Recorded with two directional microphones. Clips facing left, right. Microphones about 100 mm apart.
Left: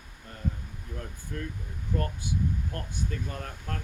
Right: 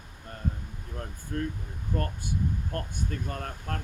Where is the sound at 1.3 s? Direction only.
40° right (ahead or behind).